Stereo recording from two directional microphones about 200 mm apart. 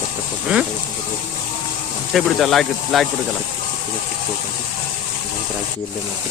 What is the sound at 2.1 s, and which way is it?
Speech, centre (ahead or behind).